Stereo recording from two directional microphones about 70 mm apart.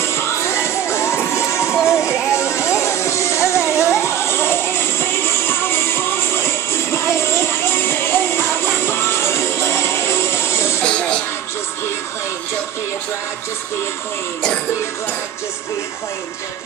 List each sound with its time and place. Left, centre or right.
0.0 s music: left
10.8 s music: centre